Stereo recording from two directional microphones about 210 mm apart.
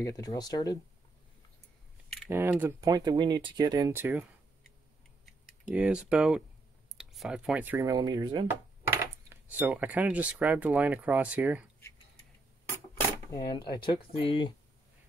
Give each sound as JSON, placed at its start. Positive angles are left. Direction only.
{"t": 0.0, "sound": "speech", "side_deg": 15}
{"t": 2.2, "sound": "speech", "side_deg": -10}
{"t": 13.3, "sound": "speech", "side_deg": 20}